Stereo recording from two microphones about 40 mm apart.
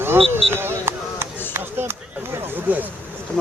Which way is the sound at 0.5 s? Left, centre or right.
Right.